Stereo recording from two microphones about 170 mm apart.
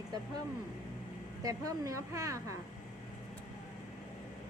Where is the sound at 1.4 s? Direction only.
20° right (ahead or behind).